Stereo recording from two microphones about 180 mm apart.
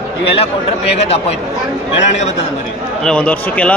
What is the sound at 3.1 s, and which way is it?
Speech, 5° left (ahead or behind).